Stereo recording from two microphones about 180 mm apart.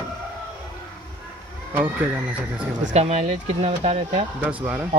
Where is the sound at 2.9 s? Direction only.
35° right (ahead or behind).